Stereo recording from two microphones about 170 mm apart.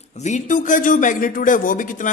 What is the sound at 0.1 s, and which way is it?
A man's voice, 45° left (ahead or behind).